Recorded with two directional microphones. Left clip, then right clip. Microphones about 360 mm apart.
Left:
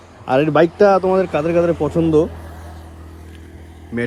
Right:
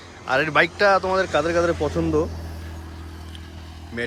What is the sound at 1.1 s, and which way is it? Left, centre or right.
Speech, left.